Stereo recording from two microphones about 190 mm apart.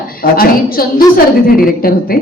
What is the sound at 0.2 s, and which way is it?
A woman's voice, 50° left (ahead or behind).